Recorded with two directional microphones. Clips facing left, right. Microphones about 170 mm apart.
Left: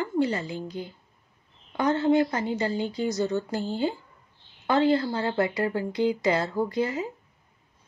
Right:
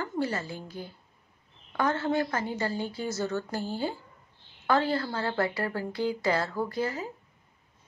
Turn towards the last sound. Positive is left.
turn(degrees=20)  # may be behind; listen again after turning